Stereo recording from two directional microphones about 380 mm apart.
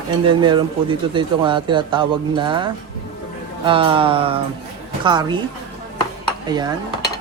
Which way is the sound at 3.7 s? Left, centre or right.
Centre.